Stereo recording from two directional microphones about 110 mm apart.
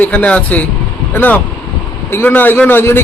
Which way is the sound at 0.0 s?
15° left (ahead or behind).